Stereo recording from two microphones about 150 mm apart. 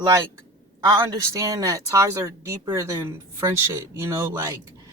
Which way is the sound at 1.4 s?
20° right (ahead or behind).